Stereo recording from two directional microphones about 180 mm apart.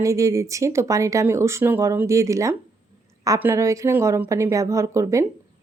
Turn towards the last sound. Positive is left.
turn(degrees=-15)  # may be behind; listen again after turning